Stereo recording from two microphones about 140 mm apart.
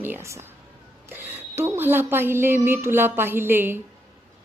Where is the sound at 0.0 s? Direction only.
15° right (ahead or behind).